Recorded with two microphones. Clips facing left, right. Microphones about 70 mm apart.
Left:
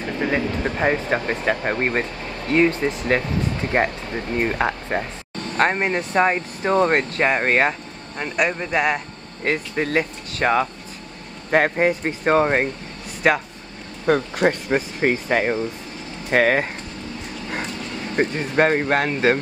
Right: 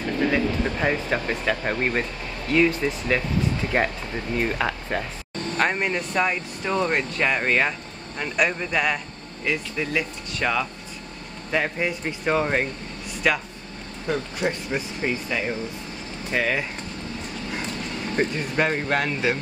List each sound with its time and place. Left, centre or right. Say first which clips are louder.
0.0 s speech: even; centre; by 7.7 s left
8.2 s speech: left 2 dB; centre
9.4 s speech: left 4 dB; left
11.5 s speech: left 7 dB; left
18.3 s speech: left 5 dB; left